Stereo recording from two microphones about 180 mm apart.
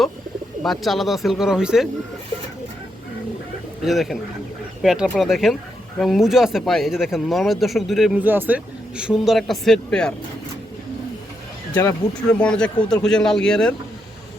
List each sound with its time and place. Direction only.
0.6 s speech: centre (ahead or behind)
3.8 s speech: centre (ahead or behind)
11.7 s speech: 15° left (ahead or behind)